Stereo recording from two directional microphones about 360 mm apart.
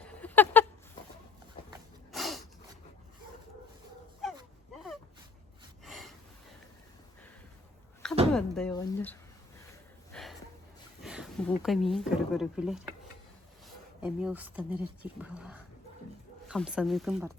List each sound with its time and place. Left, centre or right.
0.0 s a sound: centre
2.1 s snort: centre
5.8 s gasp: centre
8.3 s speech: centre
10.1 s a sound: centre
11.0 s speech: centre